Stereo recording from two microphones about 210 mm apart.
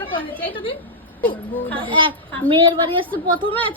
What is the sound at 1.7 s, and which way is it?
A woman's voice, 25° right (ahead or behind).